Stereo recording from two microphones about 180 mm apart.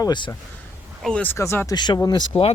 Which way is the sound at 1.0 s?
5° left (ahead or behind).